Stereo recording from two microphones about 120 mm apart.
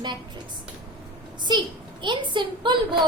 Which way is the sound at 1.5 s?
35° right (ahead or behind).